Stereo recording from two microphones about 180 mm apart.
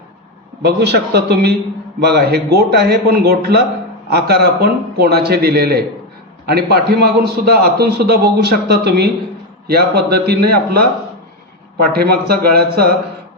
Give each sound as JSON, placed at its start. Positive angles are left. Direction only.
{"t": 0.6, "sound": "a man's voice", "side_deg": -65}
{"t": 11.9, "sound": "a man's voice", "side_deg": -60}